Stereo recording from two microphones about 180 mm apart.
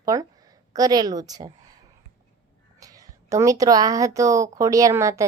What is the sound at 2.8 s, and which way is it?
A woman's voice, 20° right (ahead or behind).